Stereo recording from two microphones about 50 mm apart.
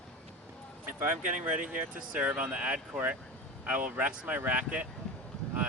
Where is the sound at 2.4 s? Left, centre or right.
Right.